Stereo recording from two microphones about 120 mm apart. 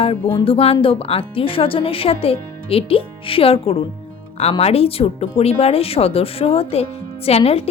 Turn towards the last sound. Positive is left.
turn(degrees=55)  # may be behind; listen again after turning